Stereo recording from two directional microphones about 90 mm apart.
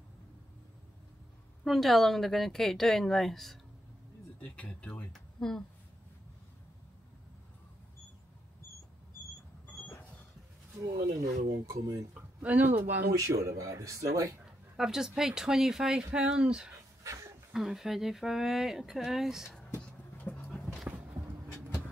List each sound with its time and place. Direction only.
1.6 s speech: centre (ahead or behind)
4.4 s speech: 15° left (ahead or behind)
5.1 s speech: 5° left (ahead or behind)
11.0 s speech: 40° right (ahead or behind)
12.1 s speech: 15° right (ahead or behind); by 14.4 s 35° right (ahead or behind)
14.4 s speech: 5° right (ahead or behind)
17.0 s a sound: 35° right (ahead or behind)
17.5 s speech: 5° right (ahead or behind)
20.2 s a sound: 20° left (ahead or behind)
20.9 s a sound: 15° right (ahead or behind)